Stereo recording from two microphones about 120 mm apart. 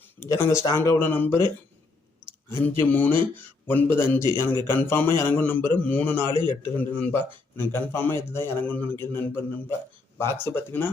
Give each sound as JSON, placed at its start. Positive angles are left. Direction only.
{"t": 0.0, "sound": "speech", "side_deg": 20}
{"t": 2.5, "sound": "speech", "side_deg": 20}